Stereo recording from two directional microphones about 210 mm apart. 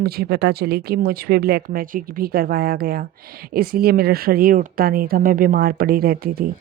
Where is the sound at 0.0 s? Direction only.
45° right (ahead or behind).